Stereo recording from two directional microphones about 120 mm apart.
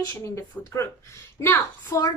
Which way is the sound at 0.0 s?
25° left (ahead or behind).